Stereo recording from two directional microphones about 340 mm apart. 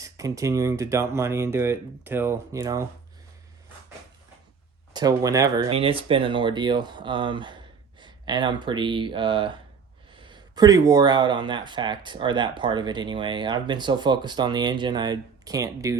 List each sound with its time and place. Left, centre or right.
0.0 s speech: centre
4.9 s speech: centre